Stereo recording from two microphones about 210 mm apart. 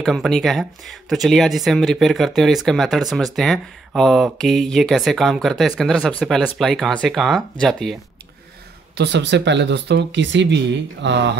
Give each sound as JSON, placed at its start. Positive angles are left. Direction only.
{"t": 0.0, "sound": "speech", "side_deg": 0}
{"t": 8.9, "sound": "speech", "side_deg": -55}